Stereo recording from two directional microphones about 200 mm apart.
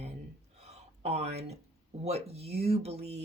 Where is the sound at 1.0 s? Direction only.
30° right (ahead or behind).